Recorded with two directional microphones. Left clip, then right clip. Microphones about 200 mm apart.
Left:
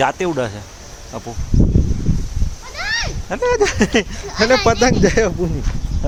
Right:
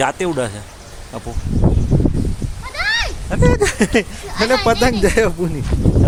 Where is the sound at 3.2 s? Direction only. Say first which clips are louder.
Left 1 dB; 5° left (ahead or behind).